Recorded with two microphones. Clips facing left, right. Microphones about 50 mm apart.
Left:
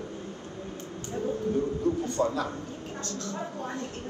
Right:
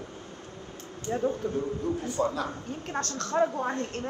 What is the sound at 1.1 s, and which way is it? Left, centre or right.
Speech, right.